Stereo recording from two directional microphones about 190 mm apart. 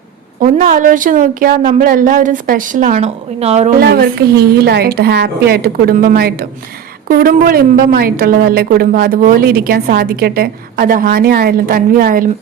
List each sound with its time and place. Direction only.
0.3 s a woman's voice: 45° right (ahead or behind)
3.8 s a woman's voice: 50° right (ahead or behind)